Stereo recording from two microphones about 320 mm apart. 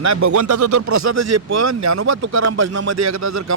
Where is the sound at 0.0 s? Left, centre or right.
Right.